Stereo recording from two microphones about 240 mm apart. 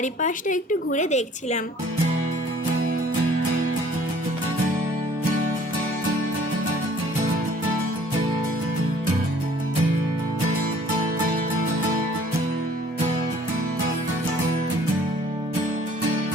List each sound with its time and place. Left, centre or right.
0.0 s a woman's voice: left